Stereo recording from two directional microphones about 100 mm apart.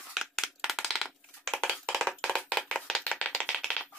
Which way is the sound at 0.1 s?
Centre (ahead or behind).